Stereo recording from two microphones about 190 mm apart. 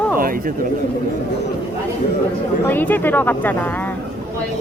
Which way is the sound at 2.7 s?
10° left (ahead or behind).